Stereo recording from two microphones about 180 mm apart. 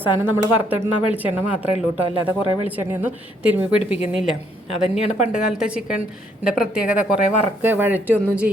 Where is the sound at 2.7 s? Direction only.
10° right (ahead or behind).